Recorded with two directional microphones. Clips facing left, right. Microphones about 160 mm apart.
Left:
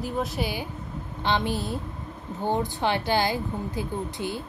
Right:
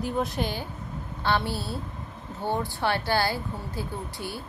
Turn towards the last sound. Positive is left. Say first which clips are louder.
# left 5 dB
turn(degrees=20)  # may be behind; listen again after turning